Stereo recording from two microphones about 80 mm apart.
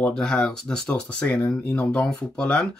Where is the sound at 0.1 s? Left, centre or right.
Centre.